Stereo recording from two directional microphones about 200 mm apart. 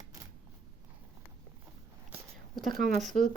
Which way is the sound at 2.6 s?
45° right (ahead or behind).